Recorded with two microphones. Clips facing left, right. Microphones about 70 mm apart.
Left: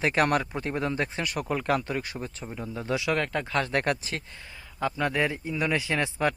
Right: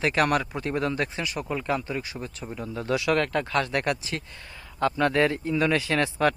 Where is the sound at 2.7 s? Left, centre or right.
Left.